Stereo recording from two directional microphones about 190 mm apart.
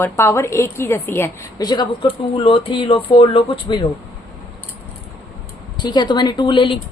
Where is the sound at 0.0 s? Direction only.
10° left (ahead or behind).